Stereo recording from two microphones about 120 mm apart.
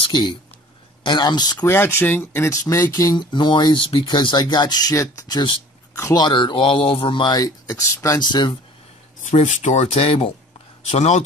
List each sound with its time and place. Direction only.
0.0 s speech: 40° left (ahead or behind)
1.6 s speech: 20° left (ahead or behind); by 7.4 s 40° left (ahead or behind)
7.4 s speech: 25° left (ahead or behind)
8.2 s speech: 35° left (ahead or behind)
9.2 s speech: 90° left; by 11.2 s 65° left (ahead or behind)